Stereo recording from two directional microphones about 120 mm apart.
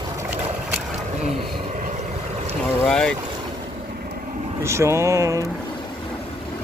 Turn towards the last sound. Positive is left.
turn(degrees=-25)  # may be behind; listen again after turning